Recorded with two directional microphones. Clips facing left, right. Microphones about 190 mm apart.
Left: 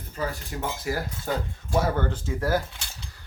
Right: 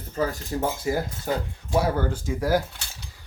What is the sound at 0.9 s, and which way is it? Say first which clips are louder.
Speech: right 3 dB; 20° right (ahead or behind).